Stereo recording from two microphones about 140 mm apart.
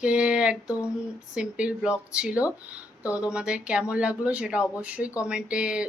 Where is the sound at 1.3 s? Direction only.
5° right (ahead or behind).